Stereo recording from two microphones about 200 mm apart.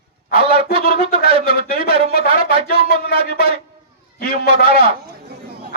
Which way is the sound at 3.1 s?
30° right (ahead or behind).